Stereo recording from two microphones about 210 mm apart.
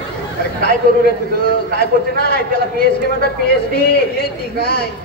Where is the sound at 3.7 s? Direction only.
50° left (ahead or behind).